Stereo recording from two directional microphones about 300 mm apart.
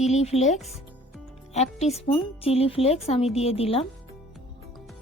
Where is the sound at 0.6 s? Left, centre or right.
Centre.